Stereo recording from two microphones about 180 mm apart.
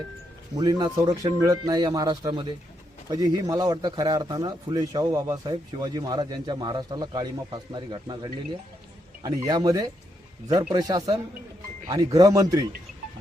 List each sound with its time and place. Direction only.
0.5 s speech: 20° right (ahead or behind)
9.5 s speech: 20° right (ahead or behind)